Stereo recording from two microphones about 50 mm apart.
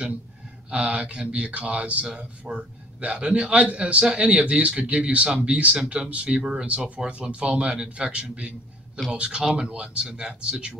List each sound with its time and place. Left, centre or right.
0.7 s speech: right